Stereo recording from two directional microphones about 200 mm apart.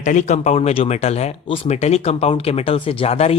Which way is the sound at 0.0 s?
35° left (ahead or behind).